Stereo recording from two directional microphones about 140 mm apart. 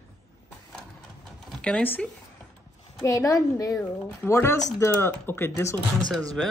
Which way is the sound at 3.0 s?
25° left (ahead or behind).